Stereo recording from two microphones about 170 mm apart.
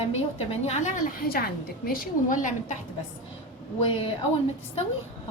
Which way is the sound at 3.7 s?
30° left (ahead or behind).